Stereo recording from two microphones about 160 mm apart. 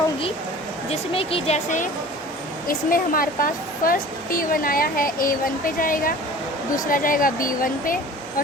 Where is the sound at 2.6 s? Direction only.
65° left (ahead or behind).